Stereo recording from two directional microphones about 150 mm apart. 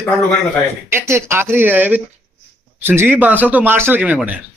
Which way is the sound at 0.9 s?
15° right (ahead or behind).